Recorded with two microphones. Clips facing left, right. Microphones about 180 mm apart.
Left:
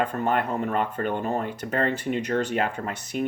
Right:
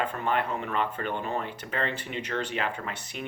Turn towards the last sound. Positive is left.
turn(degrees=45)  # may be behind; listen again after turning